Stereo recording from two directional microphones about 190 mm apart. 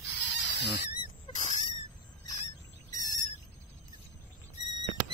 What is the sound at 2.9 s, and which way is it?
Owl, 20° left (ahead or behind).